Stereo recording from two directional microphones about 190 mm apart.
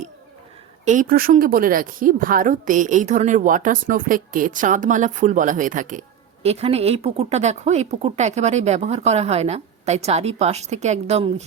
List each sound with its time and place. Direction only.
0.9 s a woman's voice: 45° right (ahead or behind)